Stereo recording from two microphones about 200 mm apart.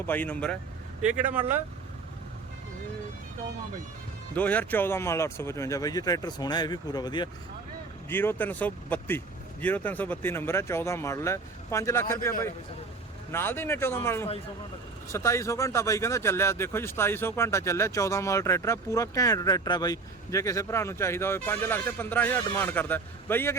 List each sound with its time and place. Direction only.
0.0 s speech: 10° left (ahead or behind)
1.3 s speech: 10° right (ahead or behind)
4.4 s speech: 10° left (ahead or behind)
8.1 s speech: 10° left (ahead or behind)
13.3 s speech: 10° left (ahead or behind)